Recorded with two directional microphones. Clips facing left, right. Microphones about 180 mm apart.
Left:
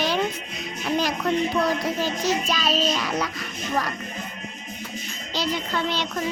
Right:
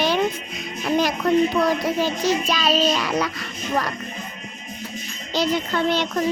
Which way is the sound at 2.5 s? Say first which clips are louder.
Right 4 dB; 75° right (ahead or behind).